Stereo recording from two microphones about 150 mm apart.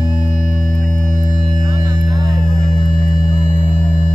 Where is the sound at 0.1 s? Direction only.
55° left (ahead or behind).